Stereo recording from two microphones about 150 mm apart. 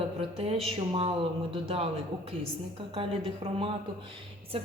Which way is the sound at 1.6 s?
40° right (ahead or behind).